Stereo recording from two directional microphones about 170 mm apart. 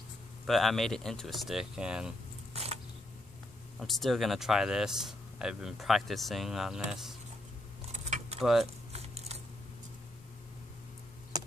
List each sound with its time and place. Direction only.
0.5 s speech: centre (ahead or behind)
2.5 s mechanisms: 40° right (ahead or behind)
3.8 s speech: centre (ahead or behind)
7.9 s keys jangling: 40° right (ahead or behind)
8.4 s speech: centre (ahead or behind)
8.9 s a sound: 40° right (ahead or behind)
11.3 s a sound: 20° right (ahead or behind)